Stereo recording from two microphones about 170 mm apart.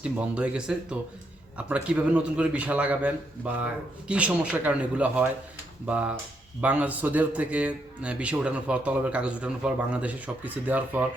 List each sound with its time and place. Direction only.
0.0 s a man's voice: 5° right (ahead or behind)